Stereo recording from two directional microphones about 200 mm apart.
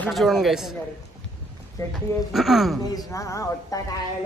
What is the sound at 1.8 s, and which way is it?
Speech, 15° left (ahead or behind).